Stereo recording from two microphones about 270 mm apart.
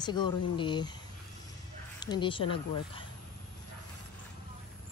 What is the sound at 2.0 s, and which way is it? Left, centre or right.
Speech, centre.